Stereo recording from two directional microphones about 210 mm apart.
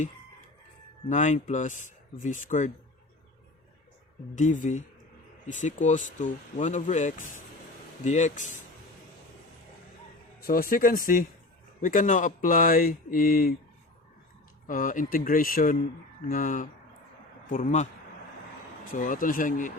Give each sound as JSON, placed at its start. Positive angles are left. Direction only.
{"t": 1.0, "sound": "speech", "side_deg": 35}
{"t": 4.4, "sound": "speech", "side_deg": 35}
{"t": 10.4, "sound": "speech", "side_deg": 45}
{"t": 14.7, "sound": "speech", "side_deg": 40}
{"t": 18.9, "sound": "speech", "side_deg": 40}